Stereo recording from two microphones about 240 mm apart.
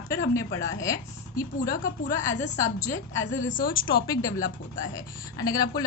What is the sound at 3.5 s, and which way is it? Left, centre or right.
Speech, left.